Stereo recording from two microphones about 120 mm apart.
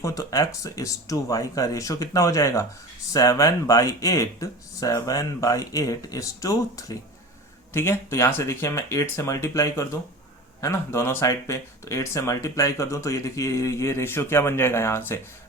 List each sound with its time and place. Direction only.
0.0 s speech: 30° left (ahead or behind)